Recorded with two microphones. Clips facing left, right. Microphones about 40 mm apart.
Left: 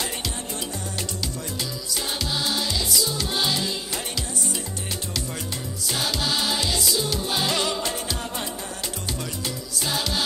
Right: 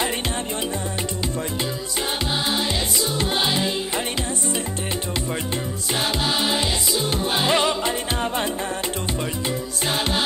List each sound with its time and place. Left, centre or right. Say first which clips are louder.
2.4 s music: right 3 dB; right
6.2 s music: right 2 dB; right